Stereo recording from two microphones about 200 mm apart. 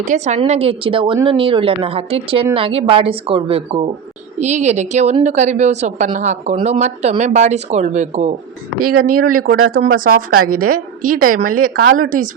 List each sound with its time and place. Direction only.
0.0 s a woman's voice: 35° right (ahead or behind)
9.0 s a woman's voice: 45° right (ahead or behind)